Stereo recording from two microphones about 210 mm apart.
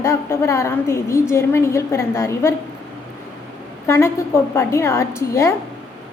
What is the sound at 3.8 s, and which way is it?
A woman's voice, 10° left (ahead or behind).